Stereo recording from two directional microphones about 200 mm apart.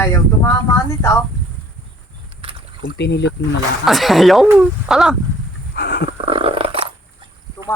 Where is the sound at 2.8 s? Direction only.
60° left (ahead or behind).